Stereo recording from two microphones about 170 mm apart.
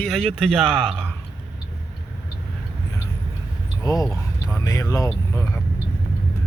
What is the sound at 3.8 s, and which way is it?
Speech, 20° left (ahead or behind).